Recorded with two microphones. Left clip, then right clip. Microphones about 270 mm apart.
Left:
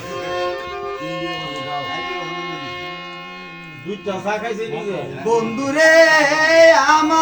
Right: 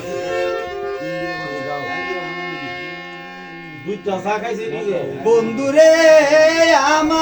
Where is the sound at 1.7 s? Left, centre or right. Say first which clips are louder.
Right 1 dB; centre.